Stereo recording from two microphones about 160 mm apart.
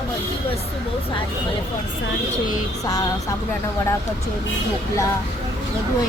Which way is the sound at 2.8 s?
20° left (ahead or behind).